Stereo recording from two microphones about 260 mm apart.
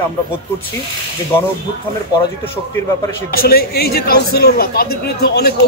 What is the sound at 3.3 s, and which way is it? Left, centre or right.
A man's voice, left.